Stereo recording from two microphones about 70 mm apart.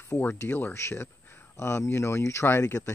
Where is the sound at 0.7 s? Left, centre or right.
Left.